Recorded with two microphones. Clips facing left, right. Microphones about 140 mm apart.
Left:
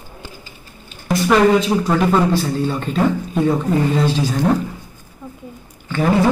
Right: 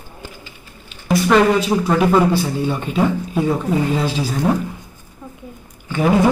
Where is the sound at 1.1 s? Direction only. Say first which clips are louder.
Even; 5° right (ahead or behind).